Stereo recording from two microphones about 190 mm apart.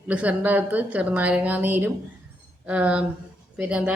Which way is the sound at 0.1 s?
5° right (ahead or behind).